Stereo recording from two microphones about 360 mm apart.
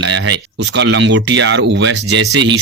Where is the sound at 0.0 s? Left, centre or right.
Right.